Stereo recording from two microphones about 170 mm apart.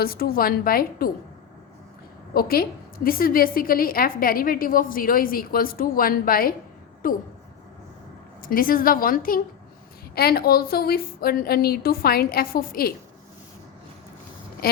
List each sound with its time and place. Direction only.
0.0 s a woman's voice: 60° left (ahead or behind)
2.3 s a woman's voice: 60° left (ahead or behind)
8.4 s a woman's voice: 55° left (ahead or behind)
14.6 s a woman's voice: 65° left (ahead or behind)